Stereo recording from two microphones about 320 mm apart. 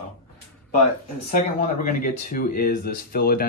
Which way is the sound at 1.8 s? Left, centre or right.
Left.